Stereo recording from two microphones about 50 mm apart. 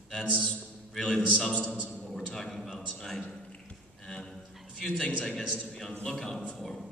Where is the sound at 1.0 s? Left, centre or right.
Left.